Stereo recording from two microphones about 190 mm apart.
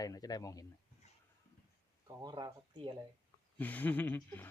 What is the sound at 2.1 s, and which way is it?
Speech, 20° right (ahead or behind).